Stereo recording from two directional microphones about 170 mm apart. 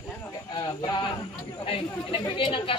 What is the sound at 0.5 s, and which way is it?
Speech, 25° left (ahead or behind).